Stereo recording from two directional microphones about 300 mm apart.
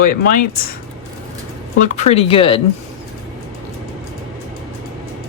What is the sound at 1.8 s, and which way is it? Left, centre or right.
Speech, left.